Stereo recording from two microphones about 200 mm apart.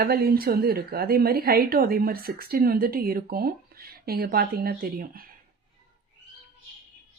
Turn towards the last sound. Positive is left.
turn(degrees=-45)  # may be behind; listen again after turning